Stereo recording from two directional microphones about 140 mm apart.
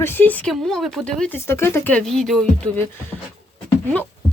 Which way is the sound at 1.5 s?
15° left (ahead or behind).